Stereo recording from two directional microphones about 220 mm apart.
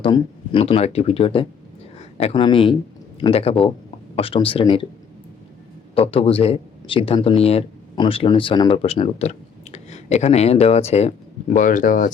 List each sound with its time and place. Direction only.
0.0 s speech: 25° left (ahead or behind)
5.9 s speech: 25° left (ahead or behind)